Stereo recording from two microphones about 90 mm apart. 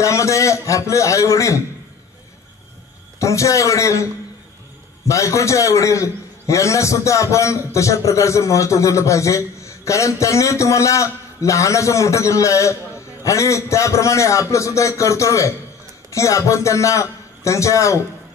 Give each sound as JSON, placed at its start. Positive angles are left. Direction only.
{"t": 0.0, "sound": "a man's voice", "side_deg": 35}
{"t": 3.2, "sound": "a man's voice", "side_deg": 35}